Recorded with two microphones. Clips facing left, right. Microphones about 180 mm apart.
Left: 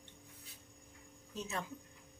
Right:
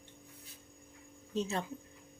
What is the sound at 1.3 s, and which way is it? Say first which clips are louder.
Speech: right 7 dB; 30° right (ahead or behind).